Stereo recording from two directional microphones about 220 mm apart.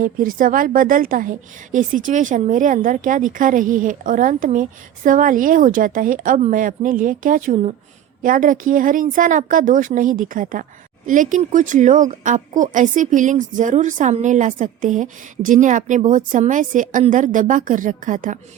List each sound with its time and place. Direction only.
0.0 s a woman's voice: 40° right (ahead or behind)